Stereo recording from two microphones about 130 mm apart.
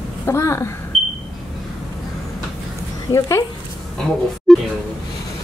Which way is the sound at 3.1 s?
25° left (ahead or behind).